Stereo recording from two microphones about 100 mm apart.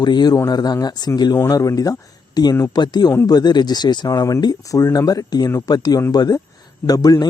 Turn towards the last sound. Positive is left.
turn(degrees=40)  # may be behind; listen again after turning